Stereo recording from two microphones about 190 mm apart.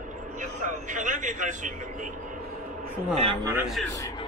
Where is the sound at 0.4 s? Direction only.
40° right (ahead or behind).